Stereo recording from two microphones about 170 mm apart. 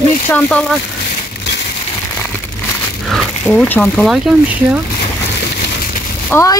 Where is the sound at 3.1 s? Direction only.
Centre (ahead or behind).